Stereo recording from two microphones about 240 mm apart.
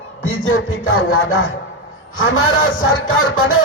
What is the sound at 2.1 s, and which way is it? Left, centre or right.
A man's voice, left.